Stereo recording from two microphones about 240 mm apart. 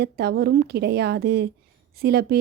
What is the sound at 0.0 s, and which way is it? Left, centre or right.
A woman's voice, right.